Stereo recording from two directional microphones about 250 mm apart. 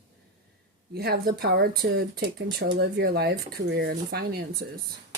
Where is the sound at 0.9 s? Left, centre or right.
Right.